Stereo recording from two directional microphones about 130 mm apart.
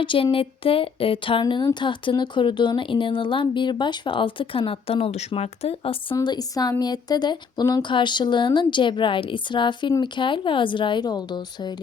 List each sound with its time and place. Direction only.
0.0 s speech: 40° left (ahead or behind)
6.1 s speech: 30° left (ahead or behind)